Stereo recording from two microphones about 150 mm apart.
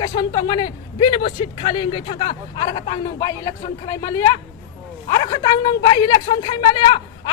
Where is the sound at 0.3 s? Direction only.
30° left (ahead or behind).